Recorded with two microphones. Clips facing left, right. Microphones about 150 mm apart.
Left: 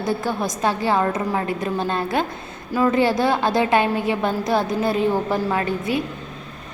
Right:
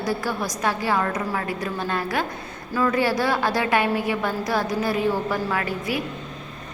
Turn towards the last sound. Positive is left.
turn(degrees=25)  # may be behind; listen again after turning